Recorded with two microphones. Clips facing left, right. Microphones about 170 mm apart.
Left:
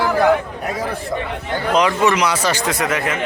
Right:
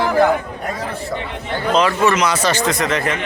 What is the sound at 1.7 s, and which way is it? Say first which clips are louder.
A man's voice: even; 15° left (ahead or behind).